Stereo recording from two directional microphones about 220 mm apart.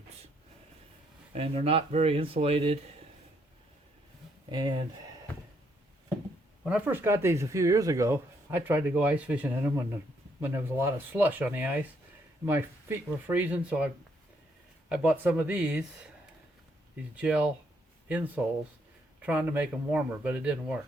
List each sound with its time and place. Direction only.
1.3 s speech: 25° right (ahead or behind)
4.5 s speech: 20° right (ahead or behind)
6.7 s speech: 5° right (ahead or behind)
17.2 s speech: 5° right (ahead or behind)